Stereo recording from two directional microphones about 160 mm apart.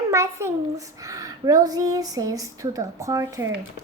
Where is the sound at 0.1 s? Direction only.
15° right (ahead or behind).